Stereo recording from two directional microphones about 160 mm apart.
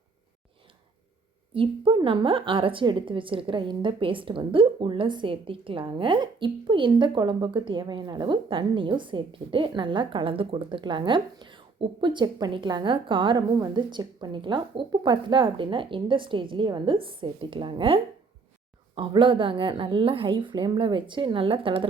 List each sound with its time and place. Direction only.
1.5 s a woman's voice: 30° right (ahead or behind)